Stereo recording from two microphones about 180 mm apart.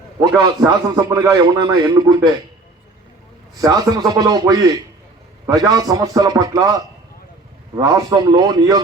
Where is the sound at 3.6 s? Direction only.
20° right (ahead or behind).